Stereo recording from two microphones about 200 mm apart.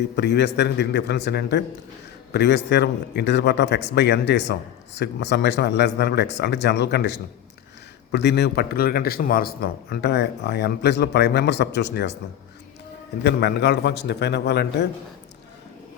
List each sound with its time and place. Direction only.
0.2 s a man's voice: 55° left (ahead or behind)
13.2 s a man's voice: 55° left (ahead or behind)